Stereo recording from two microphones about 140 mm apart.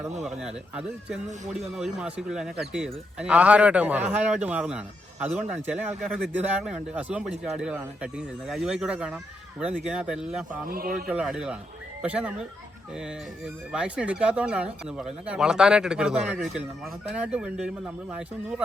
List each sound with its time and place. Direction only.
0.3 s speech: 5° right (ahead or behind)
10.7 s speech: 90° right
11.1 s speech: 5° right (ahead or behind)